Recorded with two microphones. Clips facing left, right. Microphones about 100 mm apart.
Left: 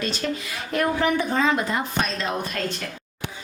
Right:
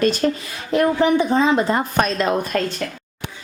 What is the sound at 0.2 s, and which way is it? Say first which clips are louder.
Speech: right 7 dB; 40° right (ahead or behind).